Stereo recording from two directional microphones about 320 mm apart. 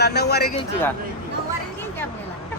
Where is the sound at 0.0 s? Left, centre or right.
Left.